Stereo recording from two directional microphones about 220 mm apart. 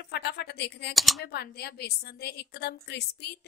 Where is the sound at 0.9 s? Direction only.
Centre (ahead or behind).